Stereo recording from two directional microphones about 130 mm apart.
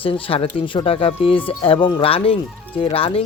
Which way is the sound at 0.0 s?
45° left (ahead or behind).